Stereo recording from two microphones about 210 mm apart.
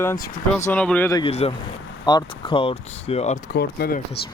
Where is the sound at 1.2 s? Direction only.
30° left (ahead or behind); by 4.2 s 45° left (ahead or behind).